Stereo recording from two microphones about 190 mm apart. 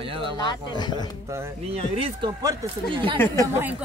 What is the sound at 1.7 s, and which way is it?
Speech, 30° right (ahead or behind).